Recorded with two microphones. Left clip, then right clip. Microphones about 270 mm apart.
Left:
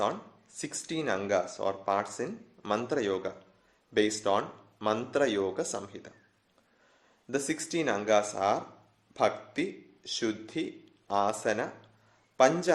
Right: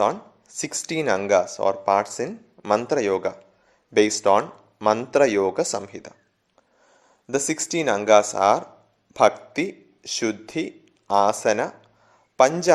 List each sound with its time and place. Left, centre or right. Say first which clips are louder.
0.0 s speech: right 9 dB; right
7.3 s speech: right 8 dB; right